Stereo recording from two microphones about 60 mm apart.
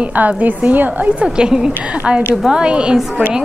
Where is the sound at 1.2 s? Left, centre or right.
Centre.